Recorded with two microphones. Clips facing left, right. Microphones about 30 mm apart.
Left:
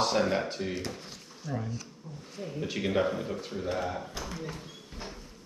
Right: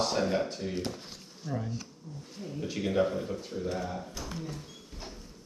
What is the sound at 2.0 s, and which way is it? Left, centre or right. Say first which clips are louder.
Speech: even; left.